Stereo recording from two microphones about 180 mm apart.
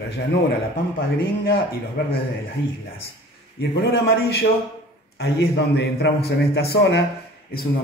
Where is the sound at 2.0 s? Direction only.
60° left (ahead or behind).